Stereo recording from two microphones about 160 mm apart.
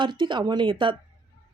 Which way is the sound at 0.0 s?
30° right (ahead or behind).